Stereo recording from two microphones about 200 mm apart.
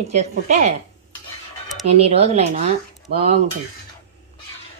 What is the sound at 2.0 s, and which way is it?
Speech, 30° right (ahead or behind).